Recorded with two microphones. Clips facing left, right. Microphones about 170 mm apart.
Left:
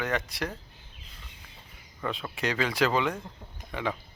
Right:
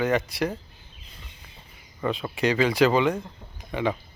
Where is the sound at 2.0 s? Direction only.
Centre (ahead or behind).